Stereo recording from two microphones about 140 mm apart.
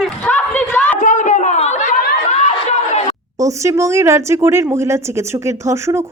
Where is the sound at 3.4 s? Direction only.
25° right (ahead or behind).